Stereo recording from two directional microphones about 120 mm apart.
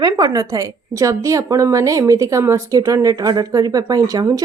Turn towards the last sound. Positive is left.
turn(degrees=-30)  # may be behind; listen again after turning